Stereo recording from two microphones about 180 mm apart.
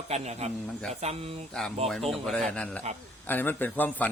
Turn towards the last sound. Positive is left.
turn(degrees=10)  # may be behind; listen again after turning